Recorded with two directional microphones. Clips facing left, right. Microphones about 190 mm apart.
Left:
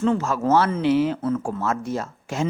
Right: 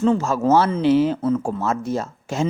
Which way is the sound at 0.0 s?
30° right (ahead or behind).